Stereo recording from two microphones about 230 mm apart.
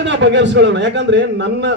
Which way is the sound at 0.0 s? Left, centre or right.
Right.